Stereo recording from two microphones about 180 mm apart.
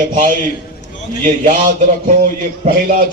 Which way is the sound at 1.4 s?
50° right (ahead or behind).